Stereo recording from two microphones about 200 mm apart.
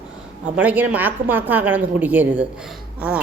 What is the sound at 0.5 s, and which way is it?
A woman's voice, 5° right (ahead or behind).